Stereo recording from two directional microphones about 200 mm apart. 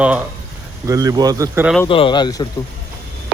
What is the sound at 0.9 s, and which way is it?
Speech, 15° right (ahead or behind).